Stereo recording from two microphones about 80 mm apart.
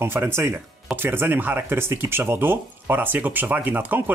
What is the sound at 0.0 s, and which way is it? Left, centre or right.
Speech, right.